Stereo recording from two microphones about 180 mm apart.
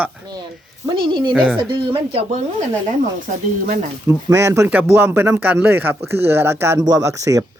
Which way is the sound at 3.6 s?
50° right (ahead or behind).